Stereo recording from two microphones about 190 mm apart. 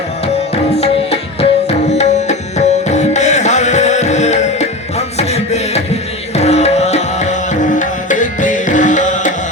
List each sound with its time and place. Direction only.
0.5 s tabla: 35° left (ahead or behind)
6.3 s music: 35° left (ahead or behind)